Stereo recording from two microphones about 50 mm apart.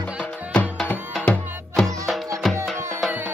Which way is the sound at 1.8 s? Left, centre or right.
Centre.